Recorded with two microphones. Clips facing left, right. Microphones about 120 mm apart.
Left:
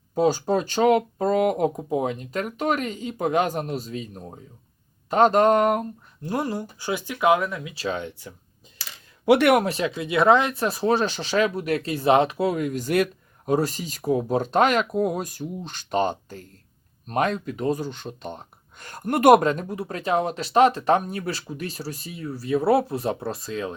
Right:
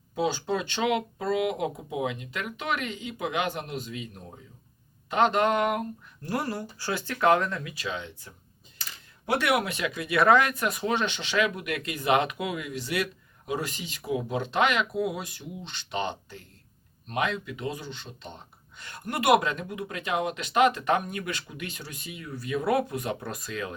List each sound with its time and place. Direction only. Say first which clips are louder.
0.1 s speech: left 7 dB; 40° left (ahead or behind)
6.2 s speech: left 4 dB; 20° left (ahead or behind)
8.8 s a sound: left 9 dB; 90° left
9.5 s speech: left 7 dB; 40° left (ahead or behind)